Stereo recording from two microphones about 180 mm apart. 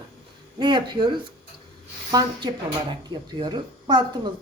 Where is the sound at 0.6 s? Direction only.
25° right (ahead or behind).